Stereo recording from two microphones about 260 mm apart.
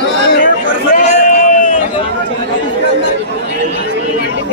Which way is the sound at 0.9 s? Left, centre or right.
Left.